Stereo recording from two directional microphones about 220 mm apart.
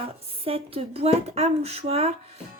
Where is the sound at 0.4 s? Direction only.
25° right (ahead or behind).